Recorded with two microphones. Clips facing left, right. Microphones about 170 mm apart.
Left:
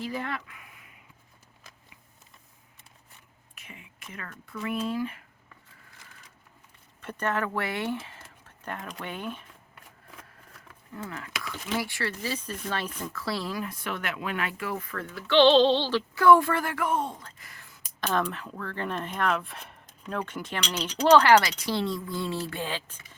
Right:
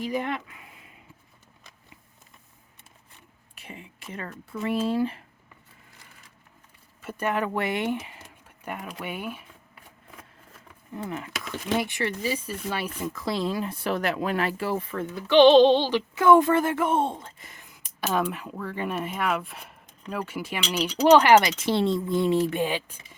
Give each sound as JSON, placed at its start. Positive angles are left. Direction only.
{"t": 0.0, "sound": "speech", "side_deg": -20}
{"t": 3.5, "sound": "speech", "side_deg": -30}
{"t": 7.0, "sound": "speech", "side_deg": -5}
{"t": 10.9, "sound": "speech", "side_deg": -20}
{"t": 18.0, "sound": "speech", "side_deg": -10}